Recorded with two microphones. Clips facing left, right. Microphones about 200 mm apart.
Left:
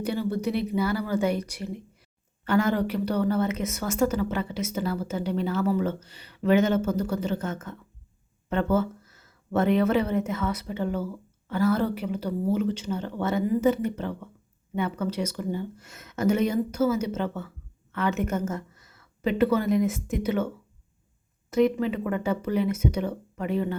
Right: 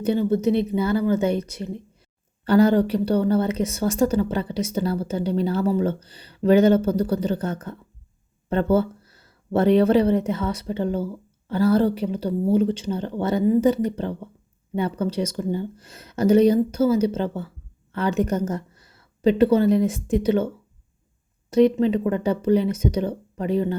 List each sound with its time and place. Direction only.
0.0 s speech: 25° right (ahead or behind)
2.4 s a woman's voice: 35° right (ahead or behind)
21.5 s speech: 30° right (ahead or behind)